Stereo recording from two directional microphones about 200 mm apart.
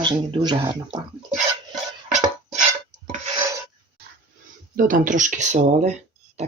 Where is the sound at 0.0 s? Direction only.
25° right (ahead or behind).